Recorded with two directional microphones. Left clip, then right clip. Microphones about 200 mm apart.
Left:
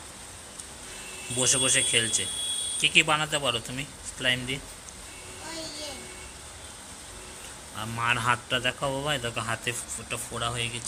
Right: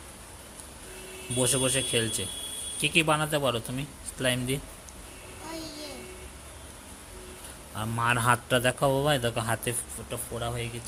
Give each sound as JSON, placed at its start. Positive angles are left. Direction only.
{"t": 1.4, "sound": "speech", "side_deg": -25}
{"t": 7.8, "sound": "a man's voice", "side_deg": -30}
{"t": 10.1, "sound": "speech", "side_deg": -15}